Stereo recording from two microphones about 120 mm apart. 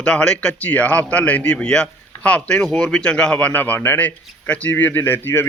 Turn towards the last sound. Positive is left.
turn(degrees=15)  # may be behind; listen again after turning